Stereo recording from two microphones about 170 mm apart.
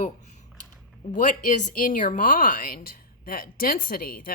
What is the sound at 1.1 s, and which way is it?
Speech, 45° left (ahead or behind).